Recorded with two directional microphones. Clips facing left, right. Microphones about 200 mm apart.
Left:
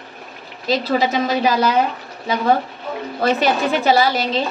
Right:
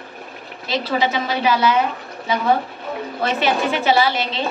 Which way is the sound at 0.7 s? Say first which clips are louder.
Left 3 dB; 40° left (ahead or behind).